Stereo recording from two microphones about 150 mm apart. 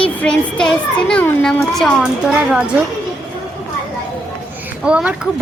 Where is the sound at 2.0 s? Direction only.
5° right (ahead or behind).